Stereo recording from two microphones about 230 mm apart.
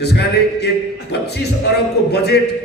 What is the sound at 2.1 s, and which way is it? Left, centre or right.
Speech, left.